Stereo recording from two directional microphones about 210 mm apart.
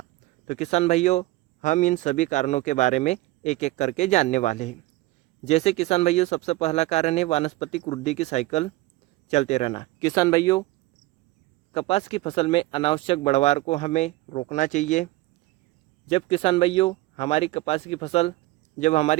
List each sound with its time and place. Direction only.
0.4 s speech: 35° left (ahead or behind)
10.0 s speech: 15° left (ahead or behind)
11.7 s speech: 30° left (ahead or behind)